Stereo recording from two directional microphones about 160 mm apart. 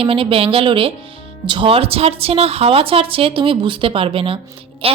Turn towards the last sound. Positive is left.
turn(degrees=-35)  # may be behind; listen again after turning